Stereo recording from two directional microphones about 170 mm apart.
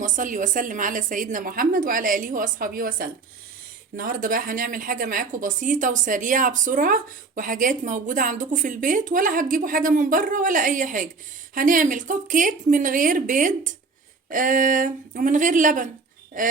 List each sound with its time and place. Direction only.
0.0 s a woman's voice: 50° right (ahead or behind)